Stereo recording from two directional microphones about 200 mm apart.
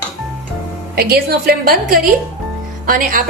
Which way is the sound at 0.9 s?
50° right (ahead or behind).